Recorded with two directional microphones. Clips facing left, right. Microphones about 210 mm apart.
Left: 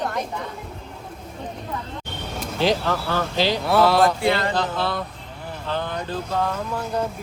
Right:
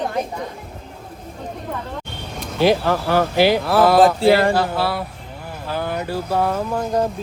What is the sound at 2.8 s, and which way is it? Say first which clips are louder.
Speech: right 5 dB; 55° right (ahead or behind).